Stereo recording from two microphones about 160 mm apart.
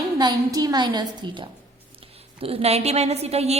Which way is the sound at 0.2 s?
25° right (ahead or behind).